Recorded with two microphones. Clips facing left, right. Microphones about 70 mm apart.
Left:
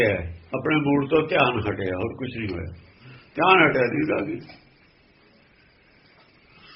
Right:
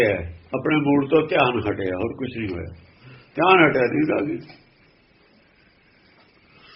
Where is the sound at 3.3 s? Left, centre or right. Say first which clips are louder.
Right 2 dB; centre.